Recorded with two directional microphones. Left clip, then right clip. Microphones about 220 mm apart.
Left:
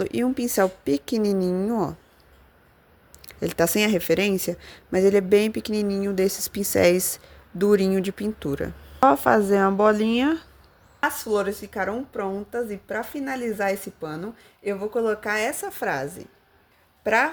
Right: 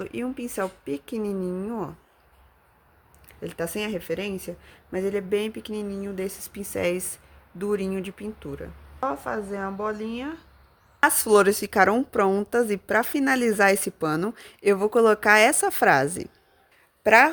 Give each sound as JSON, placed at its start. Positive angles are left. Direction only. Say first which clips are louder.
{"t": 0.0, "sound": "speech", "louder": "left 7 dB", "side_deg": 20}
{"t": 3.2, "sound": "speech", "louder": "left 9 dB", "side_deg": 25}
{"t": 11.0, "sound": "a woman's voice", "louder": "right 5 dB", "side_deg": -40}